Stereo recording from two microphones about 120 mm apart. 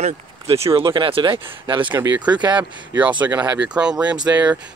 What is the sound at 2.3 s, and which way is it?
Speech, 40° right (ahead or behind).